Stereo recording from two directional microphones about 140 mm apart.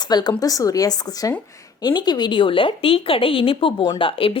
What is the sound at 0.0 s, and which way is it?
Speech, 30° left (ahead or behind).